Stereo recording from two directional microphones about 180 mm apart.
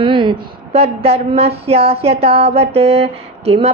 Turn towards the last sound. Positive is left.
turn(degrees=-35)  # may be behind; listen again after turning